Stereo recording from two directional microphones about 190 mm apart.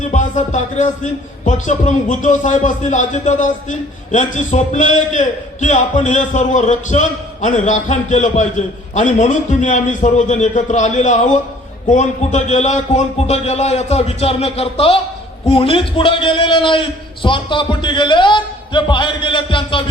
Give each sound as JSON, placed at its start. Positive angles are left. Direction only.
{"t": 0.1, "sound": "a man's voice", "side_deg": 40}